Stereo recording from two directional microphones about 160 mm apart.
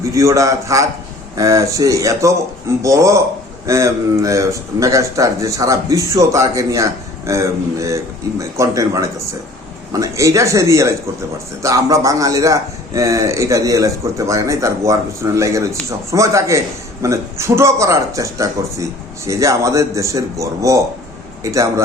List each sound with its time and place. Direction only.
0.0 s a man's voice: 20° right (ahead or behind)